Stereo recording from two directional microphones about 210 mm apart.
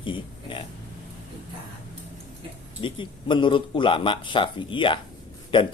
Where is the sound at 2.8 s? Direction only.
25° left (ahead or behind).